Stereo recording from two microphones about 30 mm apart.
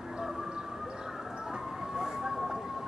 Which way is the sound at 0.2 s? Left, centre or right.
Centre.